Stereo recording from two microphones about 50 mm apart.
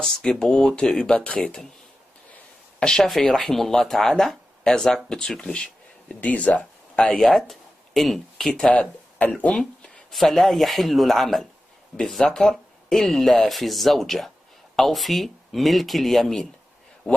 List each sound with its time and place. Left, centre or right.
0.0 s speech: centre
2.8 s speech: centre
3.1 s speech: centre
6.2 s speech: left
7.2 s speech: centre
8.6 s speech: left
9.5 s speech: centre
10.1 s speech: centre